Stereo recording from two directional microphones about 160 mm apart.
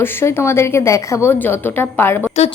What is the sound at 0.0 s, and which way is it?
A woman's voice, 15° left (ahead or behind).